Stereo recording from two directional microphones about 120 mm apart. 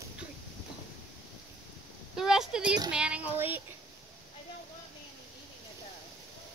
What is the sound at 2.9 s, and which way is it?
Speech, 10° right (ahead or behind).